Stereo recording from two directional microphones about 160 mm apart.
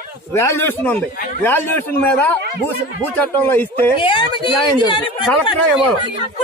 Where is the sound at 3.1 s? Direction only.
10° left (ahead or behind).